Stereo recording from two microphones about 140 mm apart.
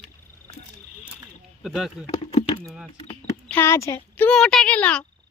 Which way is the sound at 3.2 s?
15° left (ahead or behind).